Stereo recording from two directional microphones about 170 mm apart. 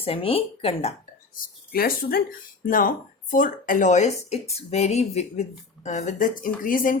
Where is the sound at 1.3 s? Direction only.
60° left (ahead or behind).